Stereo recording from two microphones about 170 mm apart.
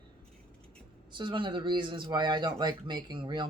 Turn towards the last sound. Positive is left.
turn(degrees=-25)  # may be behind; listen again after turning